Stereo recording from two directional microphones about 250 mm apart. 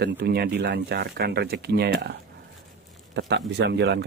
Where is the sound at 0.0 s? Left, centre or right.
Right.